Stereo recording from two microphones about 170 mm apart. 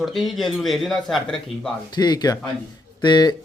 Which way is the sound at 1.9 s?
25° left (ahead or behind).